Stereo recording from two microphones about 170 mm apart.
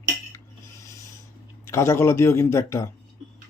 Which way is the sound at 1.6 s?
15° left (ahead or behind).